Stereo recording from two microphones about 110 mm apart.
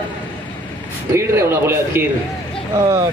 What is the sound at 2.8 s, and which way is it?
Speech, 35° right (ahead or behind).